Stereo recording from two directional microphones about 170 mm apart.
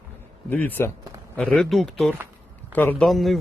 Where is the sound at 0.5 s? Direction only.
10° left (ahead or behind).